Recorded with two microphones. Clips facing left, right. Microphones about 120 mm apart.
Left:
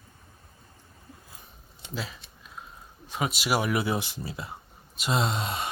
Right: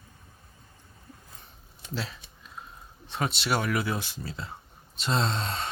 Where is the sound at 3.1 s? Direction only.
5° left (ahead or behind).